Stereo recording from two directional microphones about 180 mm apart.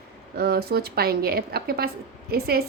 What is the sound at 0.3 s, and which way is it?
A woman's voice, 60° right (ahead or behind).